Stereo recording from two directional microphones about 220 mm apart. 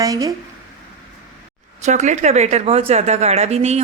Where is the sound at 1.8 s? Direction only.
35° right (ahead or behind).